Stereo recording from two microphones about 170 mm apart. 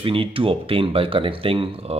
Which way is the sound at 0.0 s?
30° right (ahead or behind).